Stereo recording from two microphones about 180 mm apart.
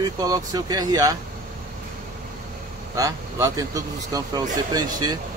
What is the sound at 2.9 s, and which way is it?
Speech, 20° right (ahead or behind).